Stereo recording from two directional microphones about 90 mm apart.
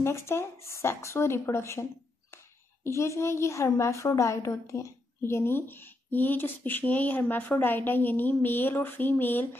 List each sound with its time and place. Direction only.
0.0 s a woman's voice: 30° left (ahead or behind)